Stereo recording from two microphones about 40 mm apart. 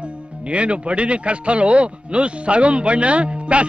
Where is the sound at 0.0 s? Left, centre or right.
Right.